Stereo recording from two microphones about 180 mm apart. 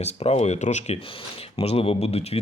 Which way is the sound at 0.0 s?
35° left (ahead or behind).